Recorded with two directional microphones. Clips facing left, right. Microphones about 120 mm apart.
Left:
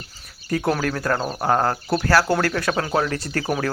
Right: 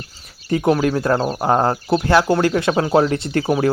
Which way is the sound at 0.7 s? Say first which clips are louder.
Right 7 dB; 20° right (ahead or behind).